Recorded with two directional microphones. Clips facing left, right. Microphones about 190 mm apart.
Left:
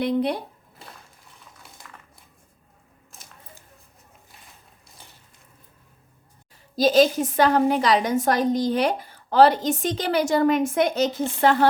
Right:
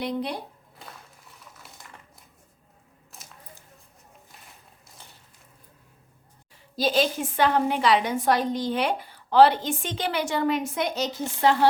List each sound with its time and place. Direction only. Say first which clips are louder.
0.0 s speech: left 6 dB; 60° left (ahead or behind)
6.7 s a woman's voice: left 6 dB; 40° left (ahead or behind)